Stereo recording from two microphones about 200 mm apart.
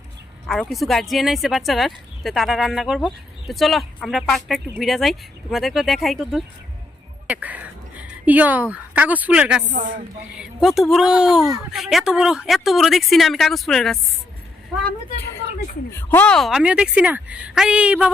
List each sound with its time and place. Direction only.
0.4 s a woman's voice: centre (ahead or behind)
9.7 s speech: 45° right (ahead or behind)
10.3 s a woman's voice: 5° right (ahead or behind)
15.9 s a woman's voice: 10° left (ahead or behind); by 18.1 s 5° right (ahead or behind)